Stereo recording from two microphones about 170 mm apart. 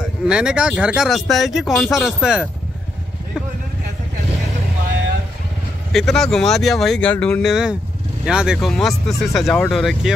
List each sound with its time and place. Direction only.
0.3 s speech: 5° right (ahead or behind)
5.9 s speech: centre (ahead or behind)